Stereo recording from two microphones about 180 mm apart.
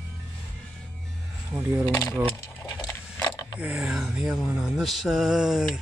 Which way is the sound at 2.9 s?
20° left (ahead or behind).